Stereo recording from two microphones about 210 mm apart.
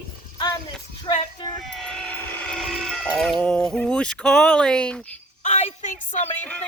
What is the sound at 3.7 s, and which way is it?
Speech, 5° left (ahead or behind).